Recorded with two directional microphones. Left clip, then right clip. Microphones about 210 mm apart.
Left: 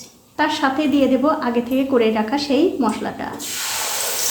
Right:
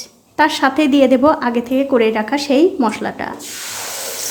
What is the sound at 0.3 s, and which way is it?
A woman's voice, 30° right (ahead or behind).